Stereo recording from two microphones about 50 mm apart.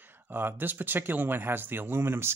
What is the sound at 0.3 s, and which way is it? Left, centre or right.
Speech, right.